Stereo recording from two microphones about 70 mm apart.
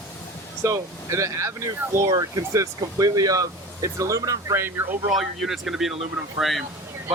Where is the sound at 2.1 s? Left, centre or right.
Right.